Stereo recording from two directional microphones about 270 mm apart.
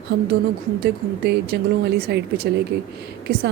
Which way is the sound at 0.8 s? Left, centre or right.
Right.